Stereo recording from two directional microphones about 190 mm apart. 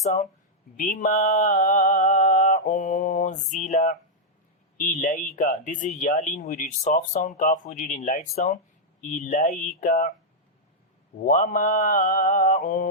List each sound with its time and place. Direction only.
0.0 s speech: 40° left (ahead or behind)
0.8 s mantra: 40° left (ahead or behind)
4.8 s speech: 45° left (ahead or behind)
11.3 s speech: 45° left (ahead or behind)